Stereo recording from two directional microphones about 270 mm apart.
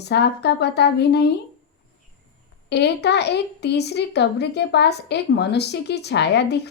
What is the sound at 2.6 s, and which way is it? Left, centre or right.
Speech, left.